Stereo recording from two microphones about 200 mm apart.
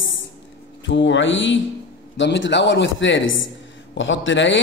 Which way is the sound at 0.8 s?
65° left (ahead or behind).